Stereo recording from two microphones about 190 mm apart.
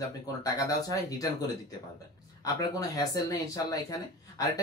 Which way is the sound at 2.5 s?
20° left (ahead or behind).